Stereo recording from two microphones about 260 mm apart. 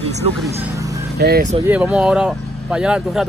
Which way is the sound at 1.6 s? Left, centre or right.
Centre.